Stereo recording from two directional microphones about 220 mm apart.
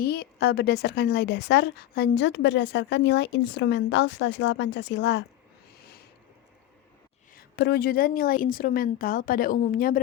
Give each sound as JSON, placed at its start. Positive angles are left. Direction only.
{"t": 0.0, "sound": "a woman's voice", "side_deg": 45}
{"t": 7.3, "sound": "a woman's voice", "side_deg": 50}